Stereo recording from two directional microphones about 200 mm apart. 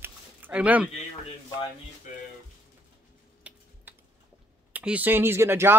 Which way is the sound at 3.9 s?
10° right (ahead or behind).